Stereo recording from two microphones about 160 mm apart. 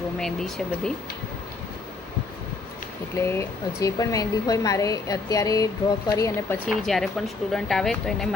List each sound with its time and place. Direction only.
0.2 s speech: centre (ahead or behind)
3.2 s speech: 15° left (ahead or behind)
6.7 s speech: centre (ahead or behind)